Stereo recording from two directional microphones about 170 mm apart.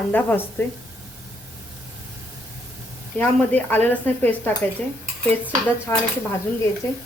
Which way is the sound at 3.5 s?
10° left (ahead or behind).